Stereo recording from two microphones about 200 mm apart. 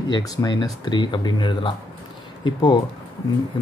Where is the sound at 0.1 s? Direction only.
20° left (ahead or behind).